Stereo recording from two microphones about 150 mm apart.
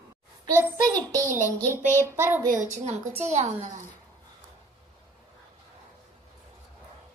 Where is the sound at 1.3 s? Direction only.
55° right (ahead or behind).